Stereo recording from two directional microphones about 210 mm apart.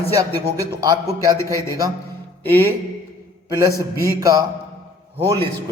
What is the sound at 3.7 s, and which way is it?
Speech, 15° left (ahead or behind).